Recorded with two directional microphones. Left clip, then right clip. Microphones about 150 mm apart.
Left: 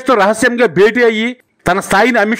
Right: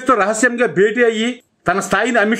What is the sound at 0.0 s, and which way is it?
A man's voice, 45° left (ahead or behind).